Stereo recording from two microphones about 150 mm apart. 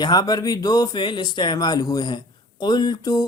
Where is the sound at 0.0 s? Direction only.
25° left (ahead or behind).